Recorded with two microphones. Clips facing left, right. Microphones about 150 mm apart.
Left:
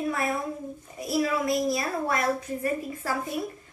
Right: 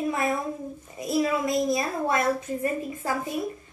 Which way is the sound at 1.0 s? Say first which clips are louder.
Right 1 dB; 20° right (ahead or behind).